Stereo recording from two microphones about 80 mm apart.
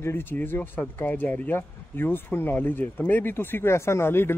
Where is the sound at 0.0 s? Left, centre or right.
Left.